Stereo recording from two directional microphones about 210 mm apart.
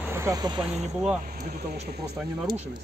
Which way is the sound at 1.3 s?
45° right (ahead or behind).